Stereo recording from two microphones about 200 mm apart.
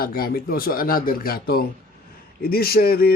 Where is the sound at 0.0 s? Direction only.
50° left (ahead or behind).